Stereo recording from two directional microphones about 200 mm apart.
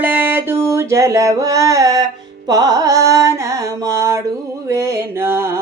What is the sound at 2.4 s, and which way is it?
Carnatic music, 20° right (ahead or behind).